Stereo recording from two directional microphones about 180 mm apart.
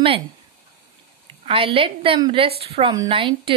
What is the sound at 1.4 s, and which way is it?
A woman's voice, 30° right (ahead or behind).